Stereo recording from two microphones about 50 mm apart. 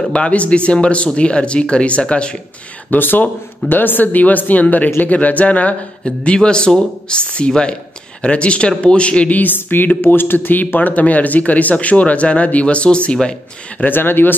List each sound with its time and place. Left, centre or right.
0.1 s speech: left
2.9 s speech: left
6.0 s speech: centre
9.4 s speech: left; by 13.4 s centre
13.7 s speech: left